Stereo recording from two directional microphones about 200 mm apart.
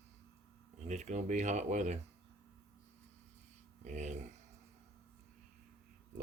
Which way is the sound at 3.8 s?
35° right (ahead or behind).